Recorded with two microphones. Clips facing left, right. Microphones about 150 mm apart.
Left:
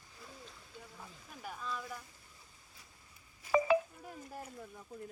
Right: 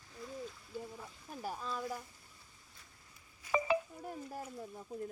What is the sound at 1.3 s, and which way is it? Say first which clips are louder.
Speech: right 2 dB; 35° right (ahead or behind).